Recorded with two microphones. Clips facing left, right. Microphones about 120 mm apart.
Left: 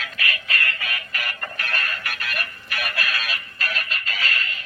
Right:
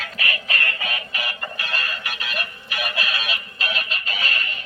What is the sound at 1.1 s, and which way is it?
Music, 15° right (ahead or behind).